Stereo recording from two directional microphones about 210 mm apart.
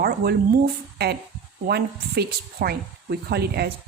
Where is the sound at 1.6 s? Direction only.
50° right (ahead or behind).